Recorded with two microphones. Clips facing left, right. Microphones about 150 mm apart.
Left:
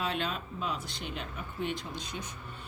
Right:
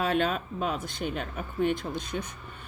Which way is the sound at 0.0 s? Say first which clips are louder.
Right 7 dB; 50° right (ahead or behind).